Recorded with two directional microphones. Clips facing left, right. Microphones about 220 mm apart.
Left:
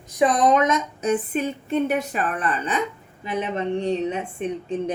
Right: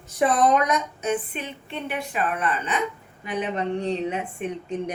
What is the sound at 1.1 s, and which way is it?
A woman's voice, 45° left (ahead or behind).